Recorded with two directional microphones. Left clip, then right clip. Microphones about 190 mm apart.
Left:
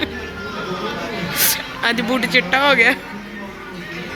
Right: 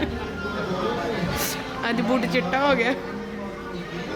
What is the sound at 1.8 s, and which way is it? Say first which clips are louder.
Speech: left 5 dB; 5° right (ahead or behind).